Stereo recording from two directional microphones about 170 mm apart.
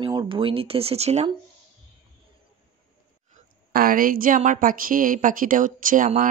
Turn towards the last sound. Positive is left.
turn(degrees=-50)  # may be behind; listen again after turning